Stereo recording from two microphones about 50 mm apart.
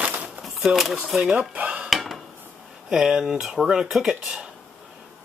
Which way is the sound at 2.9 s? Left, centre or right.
Centre.